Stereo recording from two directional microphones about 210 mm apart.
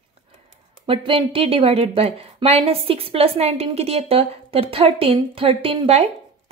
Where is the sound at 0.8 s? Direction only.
25° right (ahead or behind).